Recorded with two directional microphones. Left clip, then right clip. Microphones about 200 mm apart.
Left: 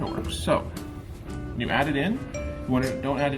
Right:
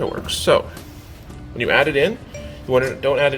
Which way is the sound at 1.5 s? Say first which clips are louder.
Right 9 dB; 50° right (ahead or behind).